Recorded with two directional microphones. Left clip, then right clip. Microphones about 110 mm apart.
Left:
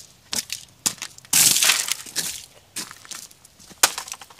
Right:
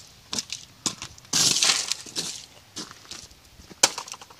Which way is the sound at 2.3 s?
5° left (ahead or behind).